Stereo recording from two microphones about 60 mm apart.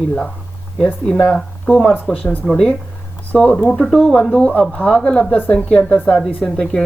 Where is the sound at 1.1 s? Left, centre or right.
Centre.